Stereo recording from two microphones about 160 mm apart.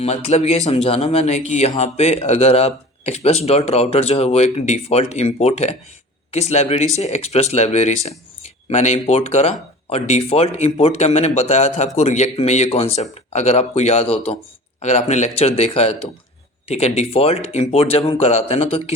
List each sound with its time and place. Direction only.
0.0 s speech: 40° left (ahead or behind)